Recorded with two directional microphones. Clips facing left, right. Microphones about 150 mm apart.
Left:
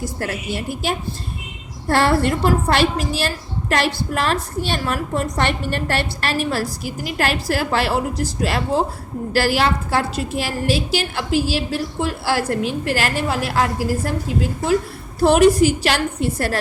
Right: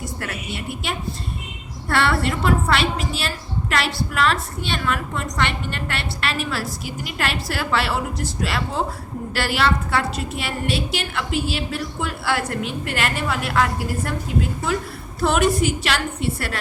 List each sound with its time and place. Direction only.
0.5 s a woman's voice: 40° left (ahead or behind)
15.2 s a woman's voice: 35° left (ahead or behind)